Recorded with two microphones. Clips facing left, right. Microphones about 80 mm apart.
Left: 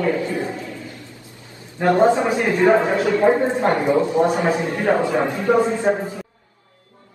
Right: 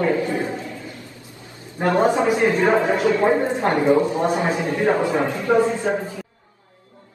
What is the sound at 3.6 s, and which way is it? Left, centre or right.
A man's voice, left.